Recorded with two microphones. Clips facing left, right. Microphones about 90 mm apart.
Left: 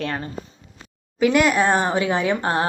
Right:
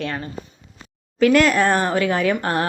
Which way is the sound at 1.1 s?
15° left (ahead or behind).